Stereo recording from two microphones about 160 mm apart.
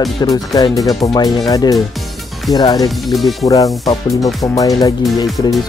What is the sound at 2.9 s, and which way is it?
Speech, centre (ahead or behind).